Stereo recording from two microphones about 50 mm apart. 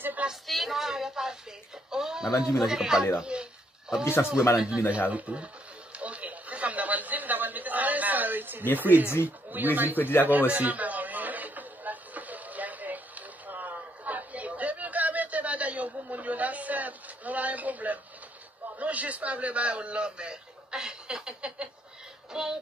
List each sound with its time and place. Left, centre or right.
0.5 s speech: centre
4.6 s speech: centre
5.9 s a sound: right
8.7 s speech: right
9.9 s speech: left
10.5 s chatter: right
18.8 s a sound: right
22.3 s music: centre